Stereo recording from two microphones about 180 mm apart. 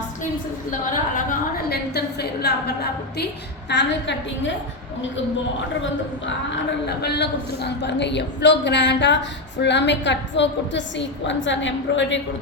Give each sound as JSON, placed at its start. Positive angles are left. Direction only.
{"t": 1.1, "sound": "a sound", "side_deg": 55}
{"t": 3.7, "sound": "a woman's voice", "side_deg": 75}
{"t": 6.8, "sound": "a woman's voice", "side_deg": 65}